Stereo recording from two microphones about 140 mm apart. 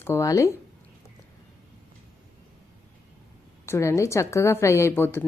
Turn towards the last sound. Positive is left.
turn(degrees=15)  # may be behind; listen again after turning